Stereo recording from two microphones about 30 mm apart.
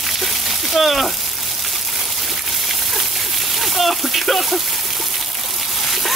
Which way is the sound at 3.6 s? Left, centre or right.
Centre.